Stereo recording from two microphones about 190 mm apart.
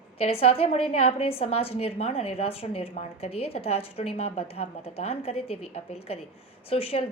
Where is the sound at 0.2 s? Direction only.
30° left (ahead or behind).